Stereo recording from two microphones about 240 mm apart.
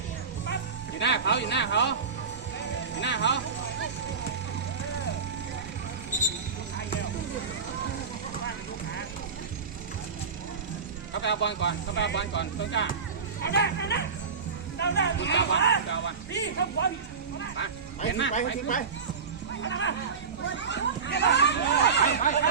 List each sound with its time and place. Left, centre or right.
0.4 s music: left
3.0 s speech: left
6.1 s music: left
11.1 s speech: left
18.1 s speech: left
19.6 s a sound: left
20.4 s speech: left